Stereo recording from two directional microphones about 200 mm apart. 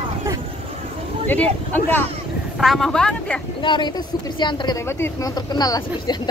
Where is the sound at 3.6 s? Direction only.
25° left (ahead or behind).